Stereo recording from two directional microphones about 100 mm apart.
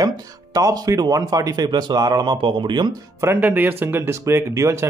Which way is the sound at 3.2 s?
20° right (ahead or behind).